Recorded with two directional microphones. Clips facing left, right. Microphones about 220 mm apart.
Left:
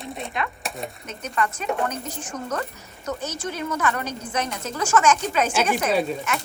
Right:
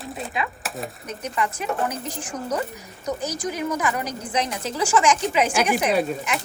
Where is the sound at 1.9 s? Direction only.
10° right (ahead or behind).